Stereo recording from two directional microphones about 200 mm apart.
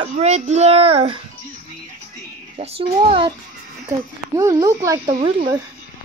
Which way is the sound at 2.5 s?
30° right (ahead or behind).